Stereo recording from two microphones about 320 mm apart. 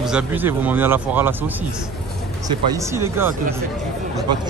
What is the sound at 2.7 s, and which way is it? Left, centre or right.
Speech, centre.